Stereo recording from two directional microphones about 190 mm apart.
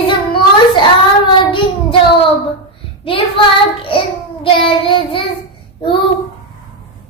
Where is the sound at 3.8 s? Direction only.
25° left (ahead or behind).